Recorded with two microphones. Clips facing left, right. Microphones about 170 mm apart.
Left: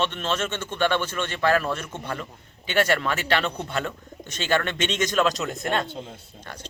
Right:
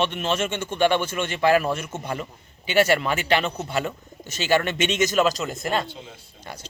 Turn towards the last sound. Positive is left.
turn(degrees=0)  # may be behind; listen again after turning